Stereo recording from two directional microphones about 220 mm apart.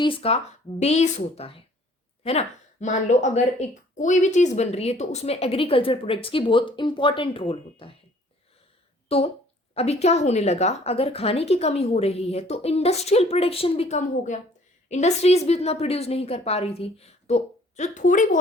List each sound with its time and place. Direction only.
0.0 s a woman's voice: 25° left (ahead or behind)
2.8 s speech: 35° left (ahead or behind)
9.0 s speech: 25° left (ahead or behind)